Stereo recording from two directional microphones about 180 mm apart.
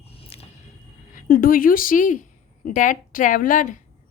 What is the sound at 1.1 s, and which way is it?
A woman's voice, 50° left (ahead or behind).